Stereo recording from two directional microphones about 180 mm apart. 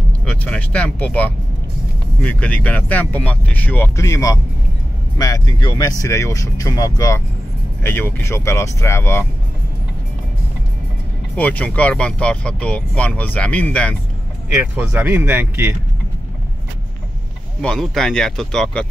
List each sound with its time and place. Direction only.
0.2 s speech: 5° left (ahead or behind)
11.3 s speech: 10° left (ahead or behind)
14.6 s speech: 10° right (ahead or behind)
17.6 s speech: 5° left (ahead or behind)